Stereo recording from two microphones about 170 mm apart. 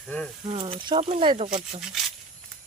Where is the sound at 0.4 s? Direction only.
30° right (ahead or behind).